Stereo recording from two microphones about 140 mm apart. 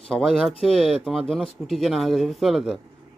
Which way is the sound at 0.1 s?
Centre (ahead or behind).